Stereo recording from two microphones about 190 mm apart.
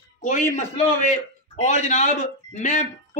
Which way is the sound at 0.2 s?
40° left (ahead or behind).